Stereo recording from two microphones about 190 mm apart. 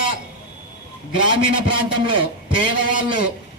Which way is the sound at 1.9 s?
25° right (ahead or behind).